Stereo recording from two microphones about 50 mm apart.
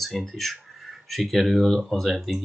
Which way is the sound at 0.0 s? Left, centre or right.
Centre.